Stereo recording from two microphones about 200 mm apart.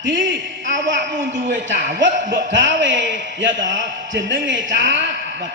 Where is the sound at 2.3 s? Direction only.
65° right (ahead or behind).